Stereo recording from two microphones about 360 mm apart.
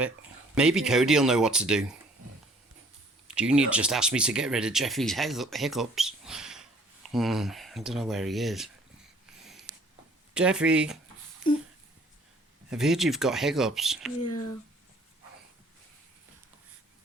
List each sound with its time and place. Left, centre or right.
0.5 s speech: centre
3.2 s speech: centre
9.4 s a sound: centre
10.3 s speech: centre
12.7 s speech: centre